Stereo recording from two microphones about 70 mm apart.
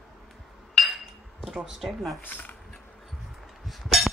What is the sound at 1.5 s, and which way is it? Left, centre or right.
Speech, centre.